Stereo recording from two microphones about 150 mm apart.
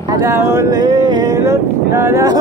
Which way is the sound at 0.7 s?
30° right (ahead or behind).